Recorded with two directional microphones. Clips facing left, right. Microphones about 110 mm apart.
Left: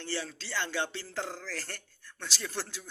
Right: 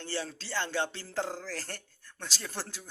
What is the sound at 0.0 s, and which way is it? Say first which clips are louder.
Speech: even; 35° right (ahead or behind).